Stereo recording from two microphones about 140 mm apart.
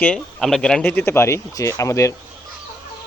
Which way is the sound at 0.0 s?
5° left (ahead or behind).